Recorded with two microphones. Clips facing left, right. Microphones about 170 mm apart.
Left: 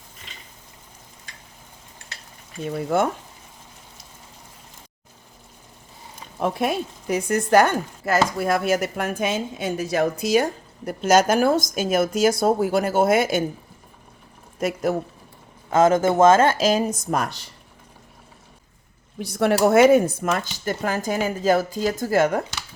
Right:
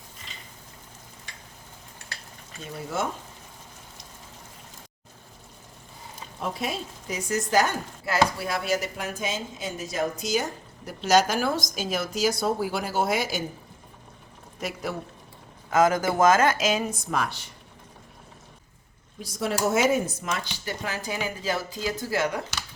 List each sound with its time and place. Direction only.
2.6 s speech: 60° left (ahead or behind)
6.4 s speech: 55° left (ahead or behind)
14.6 s speech: 50° left (ahead or behind)
15.7 s speech: 25° left (ahead or behind); by 17.3 s 45° left (ahead or behind)
19.2 s speech: 65° left (ahead or behind)